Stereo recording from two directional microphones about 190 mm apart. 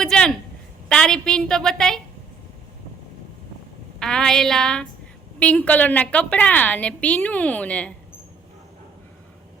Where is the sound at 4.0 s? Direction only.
5° left (ahead or behind).